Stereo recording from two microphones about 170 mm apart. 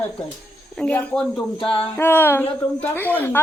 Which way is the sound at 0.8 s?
10° left (ahead or behind).